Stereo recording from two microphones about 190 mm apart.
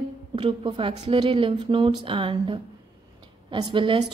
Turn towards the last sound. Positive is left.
turn(degrees=-25)  # may be behind; listen again after turning